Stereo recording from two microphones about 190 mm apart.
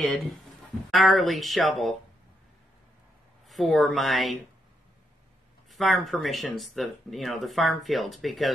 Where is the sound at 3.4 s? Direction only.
Centre (ahead or behind).